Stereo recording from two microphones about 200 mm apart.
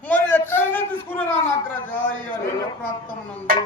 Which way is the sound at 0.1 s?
10° left (ahead or behind).